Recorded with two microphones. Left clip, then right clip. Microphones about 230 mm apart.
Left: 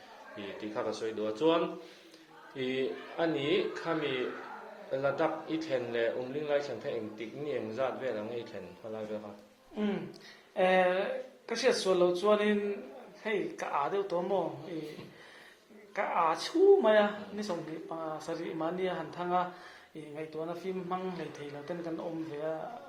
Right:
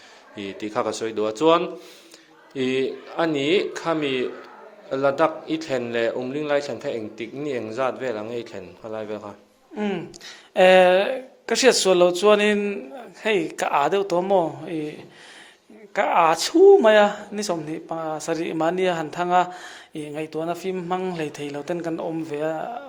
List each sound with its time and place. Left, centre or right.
0.3 s a man's voice: right
10.5 s a man's voice: right
15.9 s a man's voice: right